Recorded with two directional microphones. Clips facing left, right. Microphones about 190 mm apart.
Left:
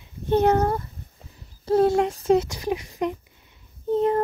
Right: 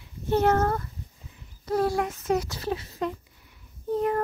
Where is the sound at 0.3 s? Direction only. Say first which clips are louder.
Left 3 dB; 15° left (ahead or behind).